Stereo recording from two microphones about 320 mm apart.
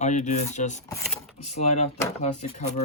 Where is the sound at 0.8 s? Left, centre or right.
Centre.